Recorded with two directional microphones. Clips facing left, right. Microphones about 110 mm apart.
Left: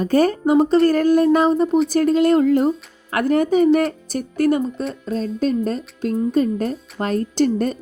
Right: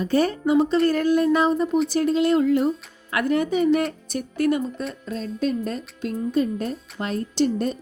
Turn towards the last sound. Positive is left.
turn(degrees=50)  # may be behind; listen again after turning